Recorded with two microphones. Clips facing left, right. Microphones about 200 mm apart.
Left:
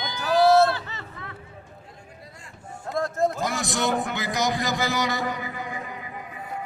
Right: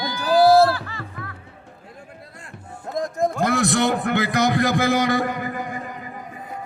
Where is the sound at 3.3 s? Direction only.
60° right (ahead or behind); by 6.1 s 45° right (ahead or behind).